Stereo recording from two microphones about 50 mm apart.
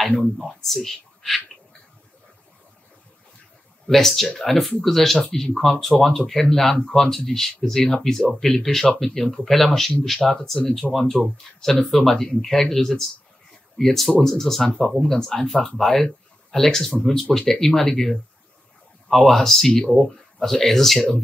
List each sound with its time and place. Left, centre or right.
0.4 s speech: centre
3.8 s speech: centre
11.1 s speech: centre
11.9 s speech: centre